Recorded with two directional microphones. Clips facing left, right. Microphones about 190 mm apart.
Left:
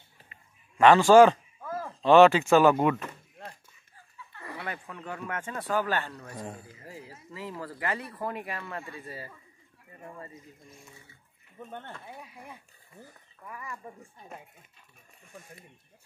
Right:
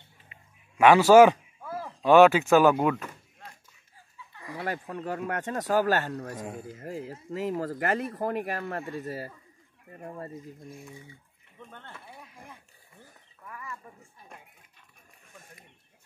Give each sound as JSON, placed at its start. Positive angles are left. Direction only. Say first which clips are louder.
{"t": 0.7, "sound": "speech", "louder": "right 1 dB", "side_deg": -10}
{"t": 4.6, "sound": "speech", "louder": "right 6 dB", "side_deg": -40}
{"t": 6.3, "sound": "speech", "louder": "right 2 dB", "side_deg": -10}
{"t": 6.7, "sound": "speech", "louder": "right 9 dB", "side_deg": -50}
{"t": 12.0, "sound": "speech", "louder": "left 3 dB", "side_deg": 15}
{"t": 13.5, "sound": "speech", "louder": "left 1 dB", "side_deg": 15}